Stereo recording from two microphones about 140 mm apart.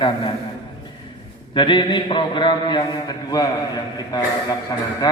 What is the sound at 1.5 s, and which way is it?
Mantra, 35° left (ahead or behind).